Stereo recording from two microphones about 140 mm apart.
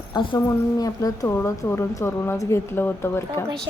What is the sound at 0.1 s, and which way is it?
A woman's voice, 30° left (ahead or behind).